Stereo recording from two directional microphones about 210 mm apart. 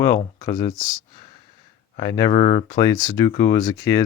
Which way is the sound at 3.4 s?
15° left (ahead or behind).